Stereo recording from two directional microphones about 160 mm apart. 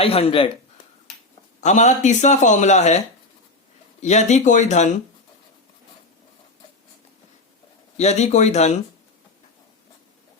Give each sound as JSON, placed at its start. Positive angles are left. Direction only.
{"t": 0.0, "sound": "a man's voice", "side_deg": 40}
{"t": 1.6, "sound": "a man's voice", "side_deg": 50}
{"t": 4.0, "sound": "a man's voice", "side_deg": 45}
{"t": 7.9, "sound": "a man's voice", "side_deg": 45}